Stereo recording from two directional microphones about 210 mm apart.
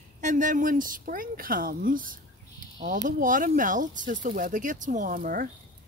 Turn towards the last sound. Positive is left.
turn(degrees=-40)  # may be behind; listen again after turning